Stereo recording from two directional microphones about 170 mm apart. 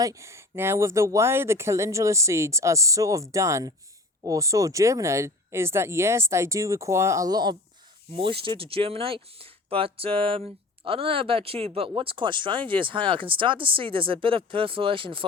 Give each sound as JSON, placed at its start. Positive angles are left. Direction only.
{"t": 0.0, "sound": "speech", "side_deg": -20}